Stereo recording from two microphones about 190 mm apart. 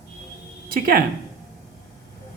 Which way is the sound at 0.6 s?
50° right (ahead or behind).